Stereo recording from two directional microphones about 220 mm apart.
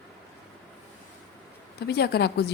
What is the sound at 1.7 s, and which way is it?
Speech, 45° left (ahead or behind).